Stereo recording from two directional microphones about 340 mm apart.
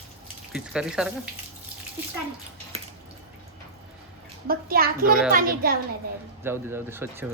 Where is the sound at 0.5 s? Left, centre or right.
Centre.